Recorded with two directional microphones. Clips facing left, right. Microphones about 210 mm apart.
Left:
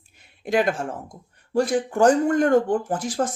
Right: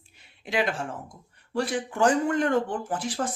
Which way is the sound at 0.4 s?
45° left (ahead or behind).